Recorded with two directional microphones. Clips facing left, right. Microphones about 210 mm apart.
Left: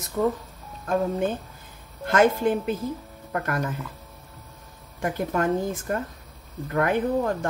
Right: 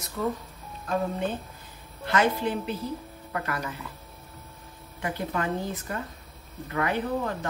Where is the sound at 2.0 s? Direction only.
50° left (ahead or behind).